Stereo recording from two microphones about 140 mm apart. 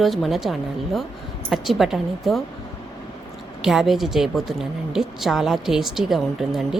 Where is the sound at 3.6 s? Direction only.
5° right (ahead or behind).